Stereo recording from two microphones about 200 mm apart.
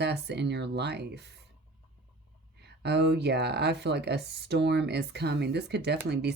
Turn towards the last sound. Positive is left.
turn(degrees=-55)  # may be behind; listen again after turning